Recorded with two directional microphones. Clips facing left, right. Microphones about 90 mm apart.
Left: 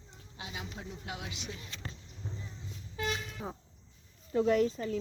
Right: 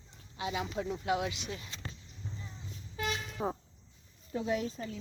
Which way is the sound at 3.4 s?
40° right (ahead or behind).